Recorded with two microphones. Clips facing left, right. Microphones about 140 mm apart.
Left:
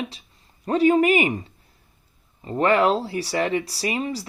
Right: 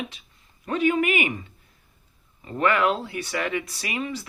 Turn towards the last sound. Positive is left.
turn(degrees=35)  # may be behind; listen again after turning